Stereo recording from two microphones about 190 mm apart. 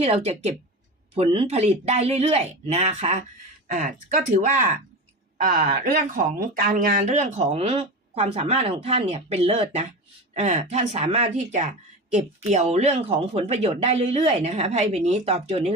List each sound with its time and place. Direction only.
0.0 s speech: 30° right (ahead or behind)
5.4 s speech: 50° right (ahead or behind); by 15.7 s 35° right (ahead or behind)